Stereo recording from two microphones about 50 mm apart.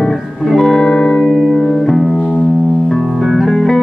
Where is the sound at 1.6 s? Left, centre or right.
Centre.